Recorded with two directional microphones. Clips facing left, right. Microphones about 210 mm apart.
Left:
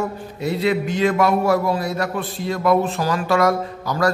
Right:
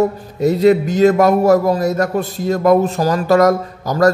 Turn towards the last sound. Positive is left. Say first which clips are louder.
# right 6 dB
turn(degrees=-45)  # may be behind; listen again after turning